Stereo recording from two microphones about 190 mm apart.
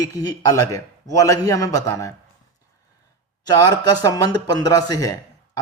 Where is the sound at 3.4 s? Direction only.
20° left (ahead or behind).